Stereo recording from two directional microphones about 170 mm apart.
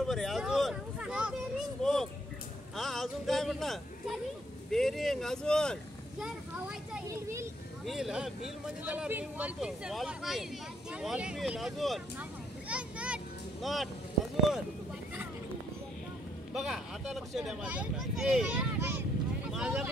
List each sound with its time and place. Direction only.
0.0 s speech: centre (ahead or behind)
1.8 s a sound: centre (ahead or behind)
2.7 s speech: centre (ahead or behind)
7.1 s a child's voice: 15° right (ahead or behind)
7.8 s speech: 5° right (ahead or behind)
16.5 s speech: centre (ahead or behind)